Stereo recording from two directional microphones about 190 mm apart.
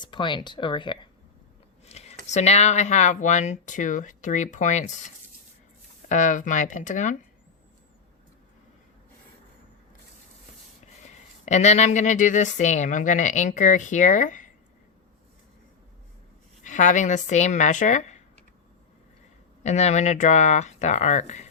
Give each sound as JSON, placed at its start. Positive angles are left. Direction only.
{"t": 0.0, "sound": "speech", "side_deg": 25}
{"t": 1.8, "sound": "a sound", "side_deg": 35}
{"t": 2.3, "sound": "speech", "side_deg": 35}
{"t": 11.0, "sound": "speech", "side_deg": 40}
{"t": 16.6, "sound": "speech", "side_deg": 40}
{"t": 19.6, "sound": "speech", "side_deg": 35}